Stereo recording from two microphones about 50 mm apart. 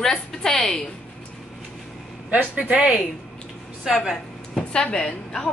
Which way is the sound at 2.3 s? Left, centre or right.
Right.